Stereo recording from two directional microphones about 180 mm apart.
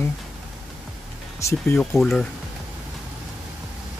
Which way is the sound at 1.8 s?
Centre (ahead or behind).